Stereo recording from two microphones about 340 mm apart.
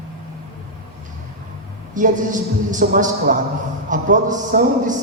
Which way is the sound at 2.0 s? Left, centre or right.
Right.